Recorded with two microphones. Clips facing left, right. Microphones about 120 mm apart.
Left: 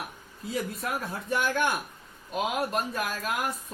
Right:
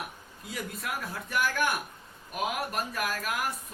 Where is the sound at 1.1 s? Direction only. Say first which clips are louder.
Left 1 dB; 25° left (ahead or behind).